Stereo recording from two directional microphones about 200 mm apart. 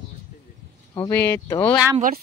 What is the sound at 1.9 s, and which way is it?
Speech, 40° right (ahead or behind).